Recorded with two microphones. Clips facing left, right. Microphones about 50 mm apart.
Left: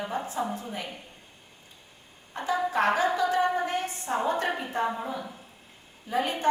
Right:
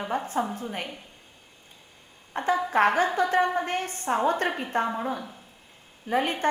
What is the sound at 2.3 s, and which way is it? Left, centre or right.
A woman's voice, right.